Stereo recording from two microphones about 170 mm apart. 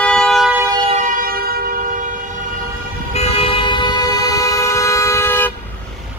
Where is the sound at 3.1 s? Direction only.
35° left (ahead or behind); by 5.5 s 15° left (ahead or behind).